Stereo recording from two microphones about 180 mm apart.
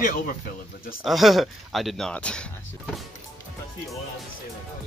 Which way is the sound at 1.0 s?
Centre (ahead or behind).